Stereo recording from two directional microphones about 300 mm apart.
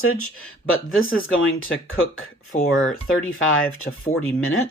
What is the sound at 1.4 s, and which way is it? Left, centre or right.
Speech, left.